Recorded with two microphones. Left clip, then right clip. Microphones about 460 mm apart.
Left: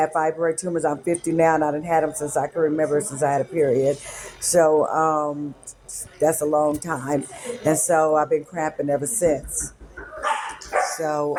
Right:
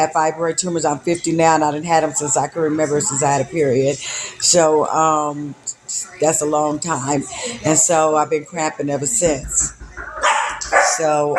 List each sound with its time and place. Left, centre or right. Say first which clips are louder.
0.0 s speech: right 4 dB; left
10.9 s speech: right 7 dB; left